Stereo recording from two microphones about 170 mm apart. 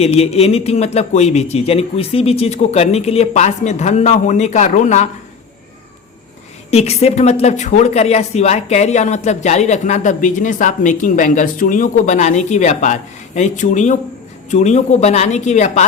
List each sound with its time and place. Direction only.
0.0 s a man's voice: 35° left (ahead or behind)
6.7 s speech: 40° left (ahead or behind)